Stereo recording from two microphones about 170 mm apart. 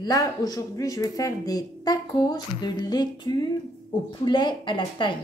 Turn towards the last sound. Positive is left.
turn(degrees=25)  # may be behind; listen again after turning